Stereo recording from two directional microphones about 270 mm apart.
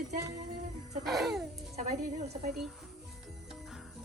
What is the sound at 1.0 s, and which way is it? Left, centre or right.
Speech, centre.